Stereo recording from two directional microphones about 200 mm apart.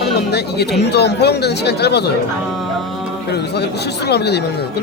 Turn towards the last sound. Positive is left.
turn(degrees=55)  # may be behind; listen again after turning